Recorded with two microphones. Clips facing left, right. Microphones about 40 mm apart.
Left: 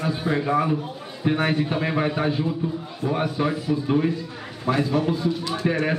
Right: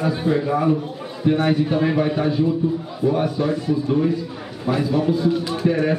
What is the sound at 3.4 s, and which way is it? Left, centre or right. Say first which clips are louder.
Speech: right 3 dB; left.